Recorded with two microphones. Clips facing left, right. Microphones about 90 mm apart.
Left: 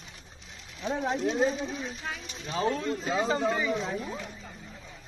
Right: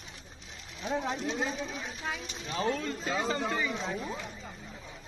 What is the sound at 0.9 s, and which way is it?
Speech, 15° left (ahead or behind).